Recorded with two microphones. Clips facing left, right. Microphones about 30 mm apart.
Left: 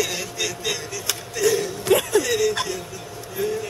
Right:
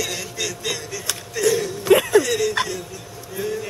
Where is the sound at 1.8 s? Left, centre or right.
Centre.